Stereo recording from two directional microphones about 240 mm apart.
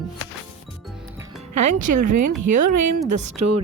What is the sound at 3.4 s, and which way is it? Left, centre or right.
Speech, right.